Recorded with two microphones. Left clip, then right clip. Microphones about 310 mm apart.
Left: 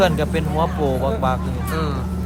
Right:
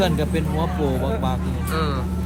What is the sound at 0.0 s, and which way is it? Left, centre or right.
Speech, centre.